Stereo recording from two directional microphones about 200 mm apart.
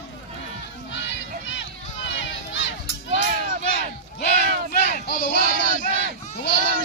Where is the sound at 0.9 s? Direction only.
65° left (ahead or behind).